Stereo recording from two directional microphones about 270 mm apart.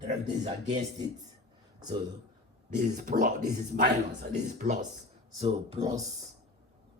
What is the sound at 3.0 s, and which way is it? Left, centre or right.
Speech, right.